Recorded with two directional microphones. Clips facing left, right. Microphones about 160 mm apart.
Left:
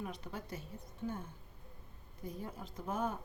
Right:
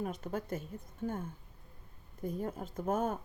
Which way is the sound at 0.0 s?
45° right (ahead or behind).